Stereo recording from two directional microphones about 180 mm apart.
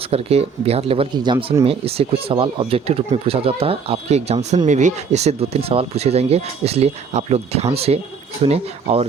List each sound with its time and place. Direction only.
0.1 s speech: 35° right (ahead or behind)